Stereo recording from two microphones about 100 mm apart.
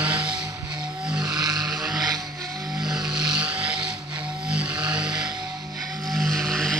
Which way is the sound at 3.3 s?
10° right (ahead or behind).